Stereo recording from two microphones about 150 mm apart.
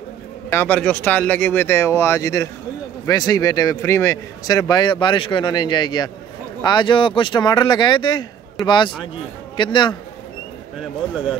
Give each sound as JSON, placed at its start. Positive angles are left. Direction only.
{"t": 0.5, "sound": "a man's voice", "side_deg": 10}
{"t": 10.8, "sound": "speech", "side_deg": -5}